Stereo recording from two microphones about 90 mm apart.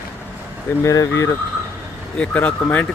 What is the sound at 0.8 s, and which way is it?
Speech, 40° left (ahead or behind).